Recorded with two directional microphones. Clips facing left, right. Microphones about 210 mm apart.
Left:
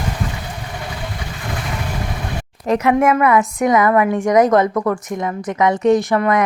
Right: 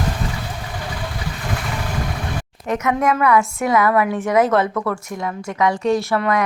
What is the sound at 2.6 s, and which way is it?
A woman's voice, 30° left (ahead or behind).